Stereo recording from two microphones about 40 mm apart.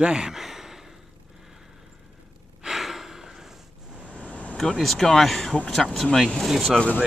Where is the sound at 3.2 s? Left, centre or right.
Centre.